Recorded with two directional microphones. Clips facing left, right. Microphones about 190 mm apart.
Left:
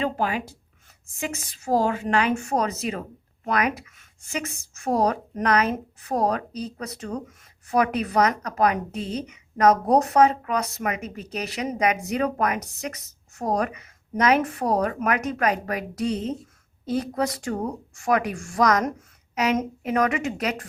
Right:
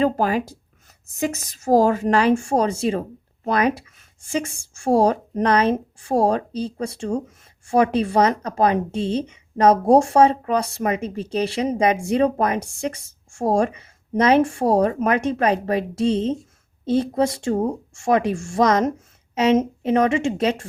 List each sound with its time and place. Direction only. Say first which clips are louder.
0.0 s a woman's voice: right 6 dB; 40° right (ahead or behind)